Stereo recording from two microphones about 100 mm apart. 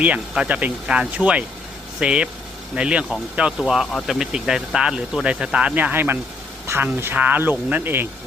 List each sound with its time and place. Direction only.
0.0 s speech: 15° right (ahead or behind)